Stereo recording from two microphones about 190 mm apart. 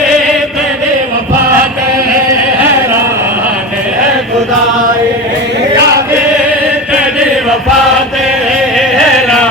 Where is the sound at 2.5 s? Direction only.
10° right (ahead or behind).